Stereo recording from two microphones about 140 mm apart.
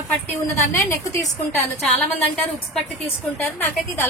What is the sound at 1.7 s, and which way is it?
A woman's voice, 5° left (ahead or behind).